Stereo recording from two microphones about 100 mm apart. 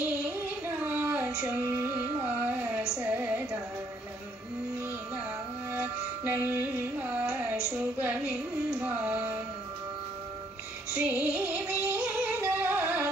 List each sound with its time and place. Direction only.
0.0 s child singing: 15° right (ahead or behind)
3.0 s music: 20° right (ahead or behind)
5.7 s carnatic music: 20° right (ahead or behind)
11.0 s music: 15° right (ahead or behind)